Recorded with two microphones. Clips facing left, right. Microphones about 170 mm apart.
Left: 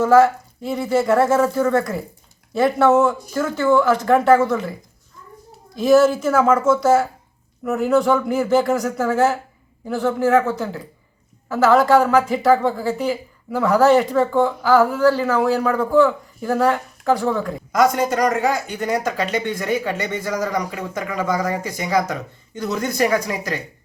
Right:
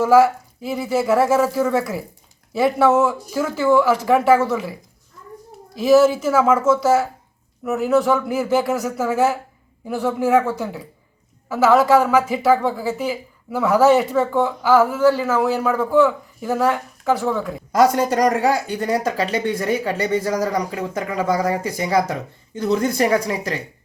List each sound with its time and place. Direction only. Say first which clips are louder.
0.0 s a woman's voice: even; 10° right (ahead or behind)
5.7 s a woman's voice: even; 5° right (ahead or behind)
17.7 s speech: right 2 dB; 35° right (ahead or behind)